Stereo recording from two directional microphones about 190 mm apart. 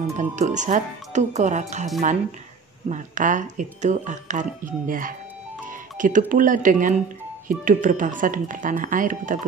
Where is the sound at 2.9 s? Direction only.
40° right (ahead or behind).